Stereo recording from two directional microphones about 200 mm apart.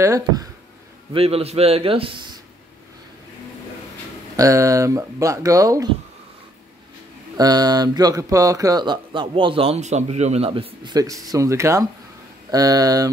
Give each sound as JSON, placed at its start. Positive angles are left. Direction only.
{"t": 0.0, "sound": "speech", "side_deg": -15}
{"t": 1.1, "sound": "speech", "side_deg": -30}
{"t": 4.4, "sound": "speech", "side_deg": -15}
{"t": 7.3, "sound": "speech", "side_deg": -20}